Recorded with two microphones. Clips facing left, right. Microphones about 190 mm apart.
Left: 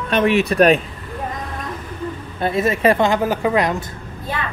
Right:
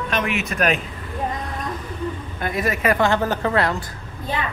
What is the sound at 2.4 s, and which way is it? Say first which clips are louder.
A woman's voice: left 6 dB; 25° left (ahead or behind).